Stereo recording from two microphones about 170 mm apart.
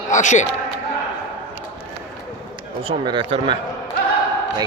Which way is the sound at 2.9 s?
30° right (ahead or behind).